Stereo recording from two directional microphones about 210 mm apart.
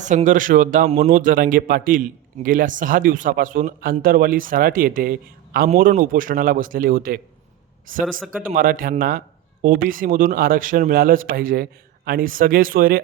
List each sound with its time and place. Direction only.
0.0 s a man's voice: 35° right (ahead or behind)